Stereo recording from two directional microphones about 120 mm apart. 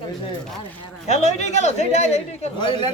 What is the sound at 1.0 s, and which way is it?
Speech, 65° left (ahead or behind).